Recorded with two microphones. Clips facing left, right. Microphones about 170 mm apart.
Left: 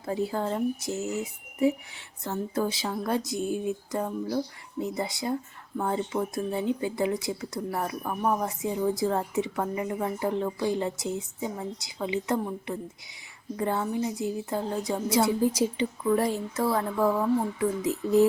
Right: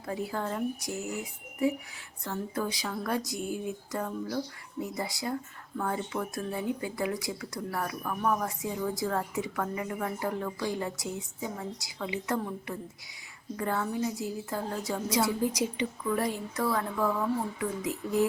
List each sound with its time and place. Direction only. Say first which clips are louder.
0.0 s speech: left 5 dB; 25° left (ahead or behind)